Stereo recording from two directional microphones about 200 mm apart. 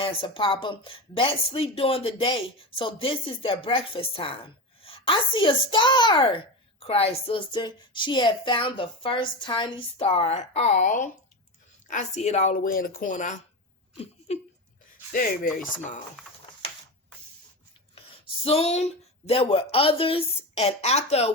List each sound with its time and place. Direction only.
0.0 s speech: 25° left (ahead or behind)
13.9 s a sound: 30° left (ahead or behind)
15.5 s speech: 40° left (ahead or behind)
18.4 s speech: 30° left (ahead or behind)